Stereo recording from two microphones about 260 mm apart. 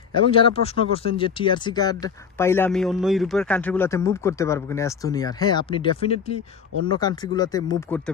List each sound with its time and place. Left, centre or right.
0.1 s speech: centre